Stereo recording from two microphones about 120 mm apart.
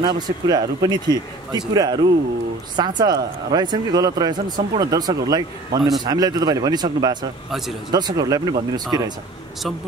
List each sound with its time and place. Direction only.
0.0 s speech: 35° right (ahead or behind)
5.8 s a man's voice: centre (ahead or behind)
6.0 s speech: 35° right (ahead or behind)